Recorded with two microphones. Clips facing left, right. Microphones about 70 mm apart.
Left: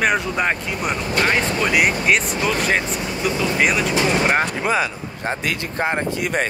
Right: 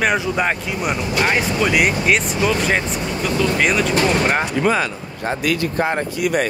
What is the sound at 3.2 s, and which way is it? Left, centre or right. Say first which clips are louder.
A man's voice: right 1 dB; centre.